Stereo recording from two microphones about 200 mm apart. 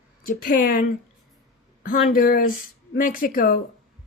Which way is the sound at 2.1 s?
45° left (ahead or behind).